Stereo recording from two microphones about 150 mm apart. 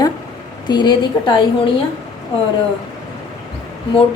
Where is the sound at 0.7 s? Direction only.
30° left (ahead or behind).